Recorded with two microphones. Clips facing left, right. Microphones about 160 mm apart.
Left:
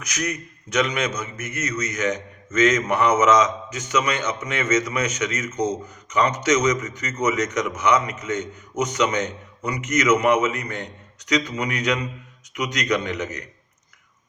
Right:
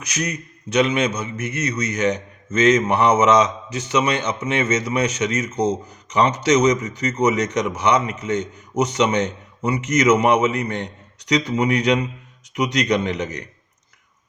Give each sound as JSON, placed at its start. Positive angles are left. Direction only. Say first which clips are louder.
{"t": 0.1, "sound": "a man's voice", "louder": "right 2 dB", "side_deg": -30}